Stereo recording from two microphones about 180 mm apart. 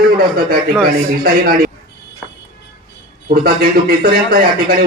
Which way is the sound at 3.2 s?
55° right (ahead or behind).